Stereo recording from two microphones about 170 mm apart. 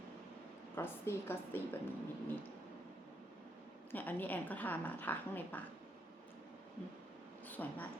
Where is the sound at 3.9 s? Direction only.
10° left (ahead or behind).